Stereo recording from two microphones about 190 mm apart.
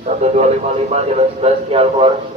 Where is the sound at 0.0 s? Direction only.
35° right (ahead or behind).